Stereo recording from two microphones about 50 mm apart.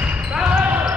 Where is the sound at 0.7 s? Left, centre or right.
Right.